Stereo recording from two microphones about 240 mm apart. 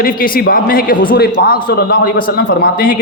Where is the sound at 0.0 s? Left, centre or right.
Left.